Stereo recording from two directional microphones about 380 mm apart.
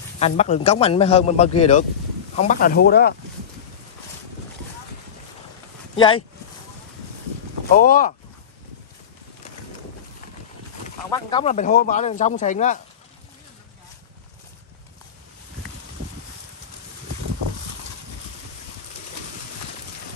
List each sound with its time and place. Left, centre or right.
0.2 s a man's voice: centre
5.9 s a man's voice: centre
7.7 s speech: left
11.1 s speech: centre